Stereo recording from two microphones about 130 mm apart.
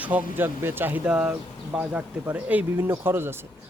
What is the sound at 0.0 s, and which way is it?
Speech, 10° right (ahead or behind).